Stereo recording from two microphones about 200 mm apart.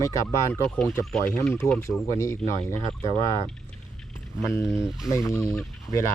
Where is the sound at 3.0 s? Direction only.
35° left (ahead or behind).